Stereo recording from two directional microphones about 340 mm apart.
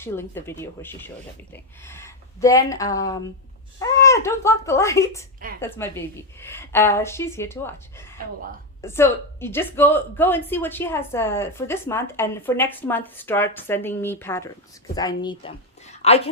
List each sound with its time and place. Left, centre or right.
0.0 s a woman's voice: centre